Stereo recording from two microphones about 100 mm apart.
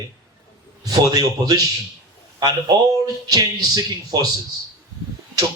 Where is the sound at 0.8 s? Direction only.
40° right (ahead or behind).